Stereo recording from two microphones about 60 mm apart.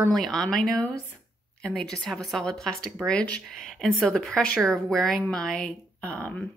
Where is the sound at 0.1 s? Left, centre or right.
Centre.